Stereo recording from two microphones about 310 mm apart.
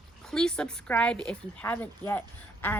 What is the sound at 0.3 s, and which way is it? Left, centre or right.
A woman's voice, centre.